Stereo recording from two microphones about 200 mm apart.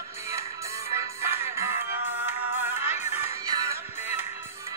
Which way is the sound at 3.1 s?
15° right (ahead or behind).